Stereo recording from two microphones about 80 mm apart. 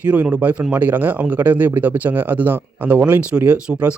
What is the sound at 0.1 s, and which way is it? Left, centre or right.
A man's voice, centre.